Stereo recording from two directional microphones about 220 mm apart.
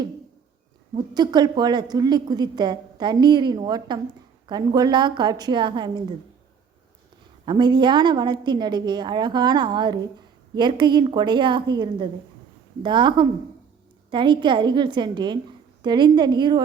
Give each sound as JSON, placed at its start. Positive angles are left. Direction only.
{"t": 0.9, "sound": "a woman's voice", "side_deg": -20}
{"t": 7.4, "sound": "a woman's voice", "side_deg": -20}